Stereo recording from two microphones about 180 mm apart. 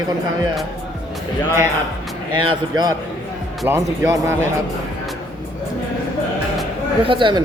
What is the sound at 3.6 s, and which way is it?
Speech, 15° right (ahead or behind).